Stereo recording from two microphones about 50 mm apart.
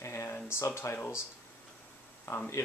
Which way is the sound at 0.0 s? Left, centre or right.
Left.